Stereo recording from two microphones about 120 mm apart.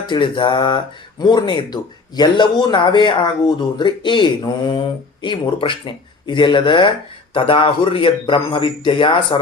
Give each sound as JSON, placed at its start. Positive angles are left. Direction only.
{"t": 0.1, "sound": "a man's voice", "side_deg": 45}